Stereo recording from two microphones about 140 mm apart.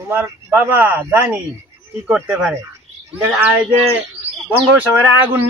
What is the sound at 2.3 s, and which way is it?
Speech, 5° right (ahead or behind).